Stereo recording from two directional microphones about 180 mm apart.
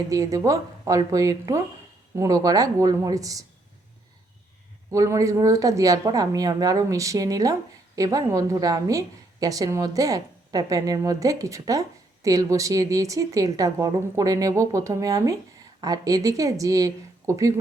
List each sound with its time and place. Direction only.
0.1 s a woman's voice: 20° right (ahead or behind)
4.9 s a woman's voice: 15° right (ahead or behind)